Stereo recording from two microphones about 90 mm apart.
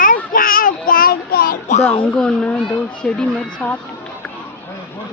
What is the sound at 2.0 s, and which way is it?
A woman's voice, 10° left (ahead or behind).